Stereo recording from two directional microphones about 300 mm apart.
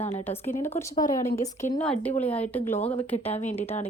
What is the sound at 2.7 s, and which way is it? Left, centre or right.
Speech, left.